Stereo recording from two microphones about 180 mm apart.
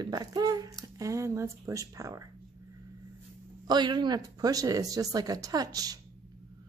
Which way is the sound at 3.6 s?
25° right (ahead or behind).